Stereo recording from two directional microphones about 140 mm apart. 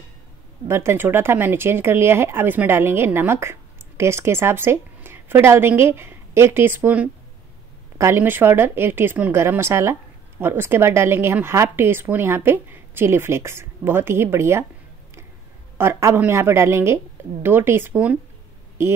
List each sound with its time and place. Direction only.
0.7 s speech: 20° right (ahead or behind)
15.8 s speech: 20° right (ahead or behind)